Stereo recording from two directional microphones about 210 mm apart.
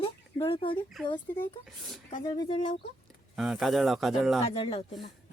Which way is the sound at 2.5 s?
35° left (ahead or behind).